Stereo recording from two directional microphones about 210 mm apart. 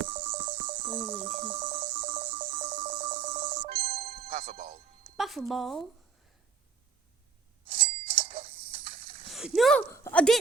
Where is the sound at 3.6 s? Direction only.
25° right (ahead or behind).